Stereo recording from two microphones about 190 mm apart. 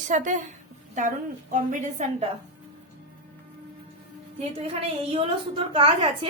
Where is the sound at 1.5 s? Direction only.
40° right (ahead or behind).